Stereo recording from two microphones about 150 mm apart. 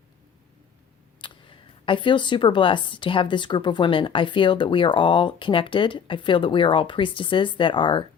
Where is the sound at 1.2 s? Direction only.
35° left (ahead or behind).